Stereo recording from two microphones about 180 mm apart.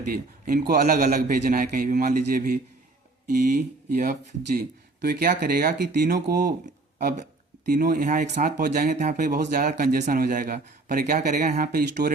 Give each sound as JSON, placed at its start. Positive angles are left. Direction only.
{"t": 0.1, "sound": "a man's voice", "side_deg": -55}
{"t": 7.7, "sound": "speech", "side_deg": -55}